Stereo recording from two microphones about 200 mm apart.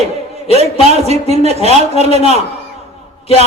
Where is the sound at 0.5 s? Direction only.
30° right (ahead or behind).